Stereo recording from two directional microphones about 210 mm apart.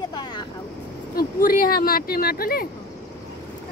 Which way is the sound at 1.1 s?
40° left (ahead or behind).